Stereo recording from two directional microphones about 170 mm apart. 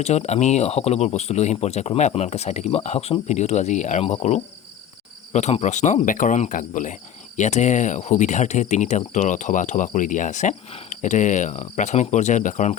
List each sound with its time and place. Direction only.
0.0 s speech: 40° left (ahead or behind)